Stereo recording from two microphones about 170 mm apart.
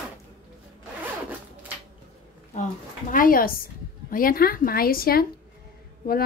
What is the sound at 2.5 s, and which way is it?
A woman's voice, 50° left (ahead or behind).